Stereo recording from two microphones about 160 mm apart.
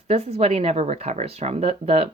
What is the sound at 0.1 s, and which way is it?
Speech, 40° right (ahead or behind).